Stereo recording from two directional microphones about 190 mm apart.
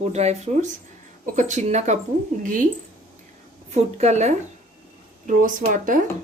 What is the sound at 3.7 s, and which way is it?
Speech, 35° right (ahead or behind).